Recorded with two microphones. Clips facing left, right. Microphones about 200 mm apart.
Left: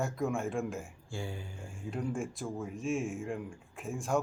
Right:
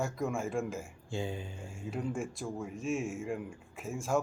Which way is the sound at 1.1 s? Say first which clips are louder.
Right 4 dB; 20° right (ahead or behind).